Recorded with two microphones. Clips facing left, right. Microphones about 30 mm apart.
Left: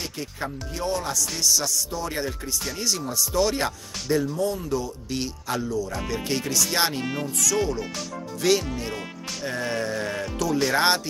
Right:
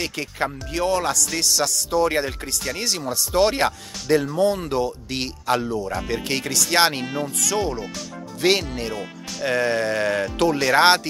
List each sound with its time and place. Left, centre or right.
0.0 s speech: right
2.1 s speech: right
4.4 s speech: right
5.9 s speech: right
6.2 s speech: right
7.3 s speech: right
8.4 s speech: right
10.6 s speech: right